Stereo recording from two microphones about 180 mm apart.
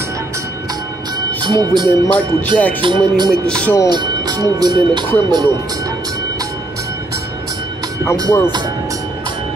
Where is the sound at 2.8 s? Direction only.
25° right (ahead or behind).